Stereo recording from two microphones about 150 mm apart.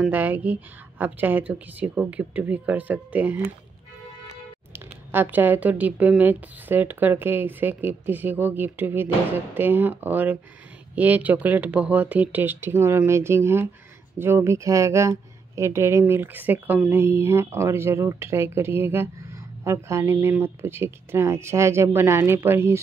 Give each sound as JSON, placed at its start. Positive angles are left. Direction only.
{"t": 0.0, "sound": "speech", "side_deg": -10}
{"t": 4.7, "sound": "speech", "side_deg": -15}